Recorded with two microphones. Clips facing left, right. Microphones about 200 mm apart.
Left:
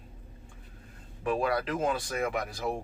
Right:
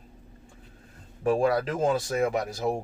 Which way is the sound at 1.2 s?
45° right (ahead or behind).